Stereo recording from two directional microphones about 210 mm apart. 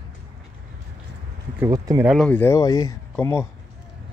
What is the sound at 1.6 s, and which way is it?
Speech, 15° right (ahead or behind).